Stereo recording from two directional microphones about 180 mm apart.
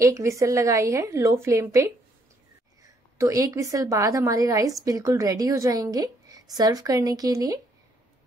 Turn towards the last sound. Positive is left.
turn(degrees=-20)  # may be behind; listen again after turning